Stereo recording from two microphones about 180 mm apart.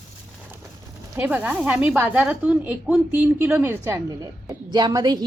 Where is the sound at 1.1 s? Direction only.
10° right (ahead or behind).